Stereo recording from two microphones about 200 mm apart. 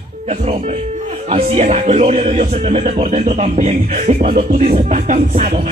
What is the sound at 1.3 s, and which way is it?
Speech, 35° right (ahead or behind).